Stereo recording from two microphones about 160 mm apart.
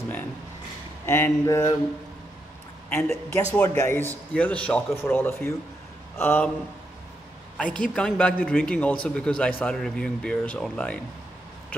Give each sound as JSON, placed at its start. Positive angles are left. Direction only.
{"t": 1.0, "sound": "speech", "side_deg": 15}
{"t": 2.9, "sound": "speech", "side_deg": 15}
{"t": 7.7, "sound": "speech", "side_deg": 5}